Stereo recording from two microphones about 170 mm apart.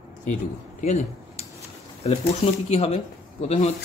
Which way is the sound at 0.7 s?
45° left (ahead or behind).